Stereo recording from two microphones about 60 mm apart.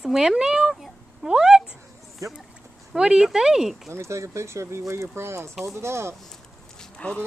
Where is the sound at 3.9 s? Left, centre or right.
Right.